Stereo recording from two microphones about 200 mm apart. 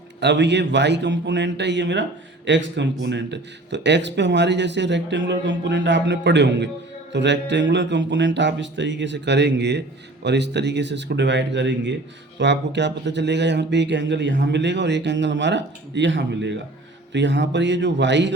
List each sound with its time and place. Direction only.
0.2 s speech: 60° right (ahead or behind)